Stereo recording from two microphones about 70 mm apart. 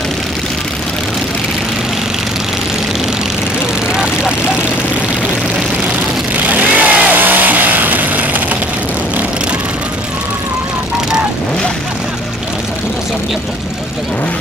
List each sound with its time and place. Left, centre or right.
3.9 s vehicle: centre
6.5 s vehicle: right